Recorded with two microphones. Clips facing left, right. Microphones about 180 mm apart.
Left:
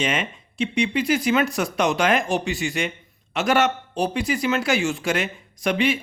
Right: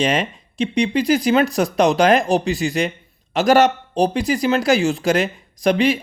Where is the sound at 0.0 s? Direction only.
35° right (ahead or behind).